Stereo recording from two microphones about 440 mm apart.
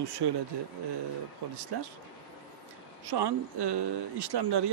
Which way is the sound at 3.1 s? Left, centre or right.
Right.